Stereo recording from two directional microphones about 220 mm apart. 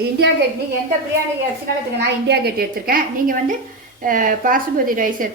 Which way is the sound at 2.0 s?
50° right (ahead or behind).